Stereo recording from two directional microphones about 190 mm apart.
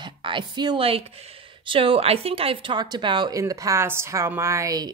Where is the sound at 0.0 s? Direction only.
25° right (ahead or behind).